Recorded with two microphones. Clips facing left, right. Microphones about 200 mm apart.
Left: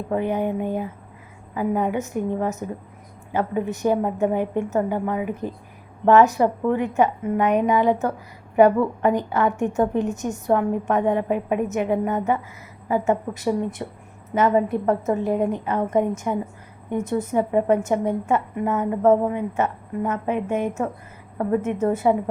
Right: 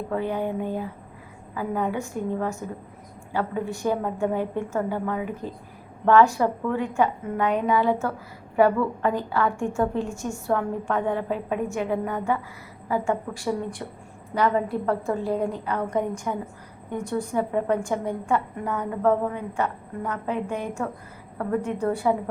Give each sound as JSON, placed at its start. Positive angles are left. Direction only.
{"t": 0.1, "sound": "a woman's voice", "side_deg": 20}